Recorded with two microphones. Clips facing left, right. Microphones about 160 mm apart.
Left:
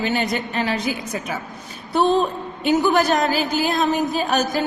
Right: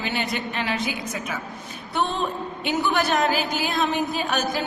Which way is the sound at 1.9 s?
35° left (ahead or behind).